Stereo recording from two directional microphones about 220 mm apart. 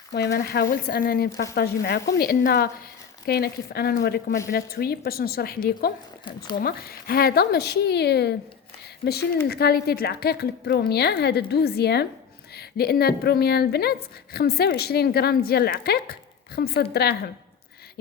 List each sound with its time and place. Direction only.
0.1 s a woman's voice: 50° left (ahead or behind)